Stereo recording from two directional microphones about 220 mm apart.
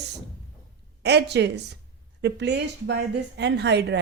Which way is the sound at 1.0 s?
50° right (ahead or behind).